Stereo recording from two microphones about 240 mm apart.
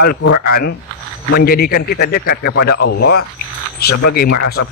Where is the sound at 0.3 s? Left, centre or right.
Left.